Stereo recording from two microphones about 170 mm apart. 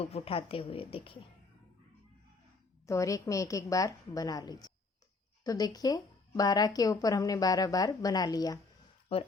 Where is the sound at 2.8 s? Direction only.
20° left (ahead or behind).